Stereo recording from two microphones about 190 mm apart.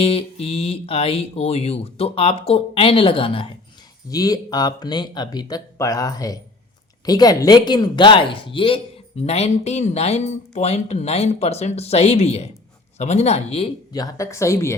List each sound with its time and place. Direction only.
0.0 s speech: 30° left (ahead or behind)
13.9 s speech: 20° left (ahead or behind)